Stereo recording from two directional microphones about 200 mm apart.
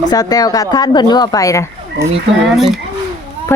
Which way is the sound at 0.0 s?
20° left (ahead or behind).